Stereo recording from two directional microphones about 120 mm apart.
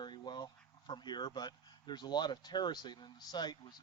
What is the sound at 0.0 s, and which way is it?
Speech, 40° left (ahead or behind).